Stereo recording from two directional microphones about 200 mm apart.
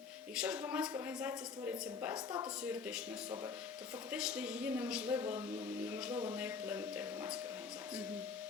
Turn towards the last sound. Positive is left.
turn(degrees=-5)  # may be behind; listen again after turning